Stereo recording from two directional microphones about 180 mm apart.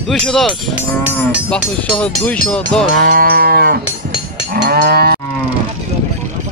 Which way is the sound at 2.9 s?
65° right (ahead or behind).